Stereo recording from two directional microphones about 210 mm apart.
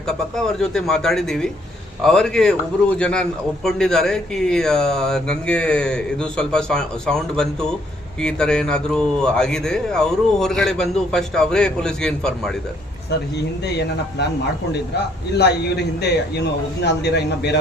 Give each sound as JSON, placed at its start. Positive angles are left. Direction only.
{"t": 0.4, "sound": "a man's voice", "side_deg": 0}
{"t": 16.8, "sound": "a man's voice", "side_deg": 55}